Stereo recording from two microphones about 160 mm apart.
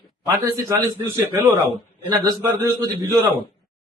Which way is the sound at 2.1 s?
25° right (ahead or behind).